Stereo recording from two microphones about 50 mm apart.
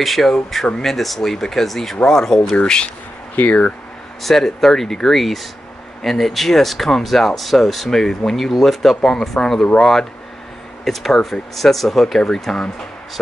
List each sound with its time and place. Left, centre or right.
0.0 s speech: centre
0.9 s speech: centre
2.5 s speech: centre
3.3 s speech: left
4.2 s speech: centre
10.9 s speech: centre